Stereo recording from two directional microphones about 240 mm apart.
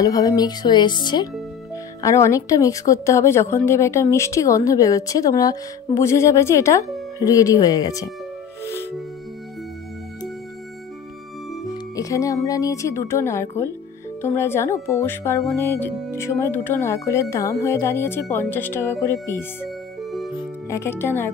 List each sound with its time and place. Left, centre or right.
0.0 s a woman's voice: centre
11.9 s a woman's voice: centre
20.0 s music: centre
20.7 s a woman's voice: centre